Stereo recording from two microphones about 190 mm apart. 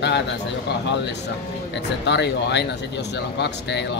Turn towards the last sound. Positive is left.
turn(degrees=65)  # may be behind; listen again after turning